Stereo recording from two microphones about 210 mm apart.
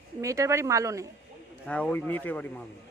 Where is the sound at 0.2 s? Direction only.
15° right (ahead or behind).